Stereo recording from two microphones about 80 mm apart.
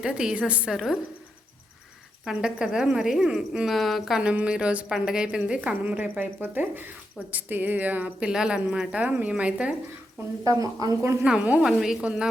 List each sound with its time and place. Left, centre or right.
0.0 s a woman's voice: centre
2.2 s a woman's voice: centre
4.2 s a woman's voice: centre
10.4 s speech: right
11.2 s a woman's voice: centre
11.6 s a woman's voice: centre